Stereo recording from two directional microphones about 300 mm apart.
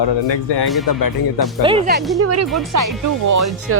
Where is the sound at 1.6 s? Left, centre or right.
Centre.